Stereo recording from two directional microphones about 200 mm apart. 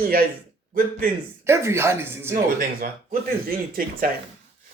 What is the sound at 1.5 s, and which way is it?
Speech, 10° right (ahead or behind).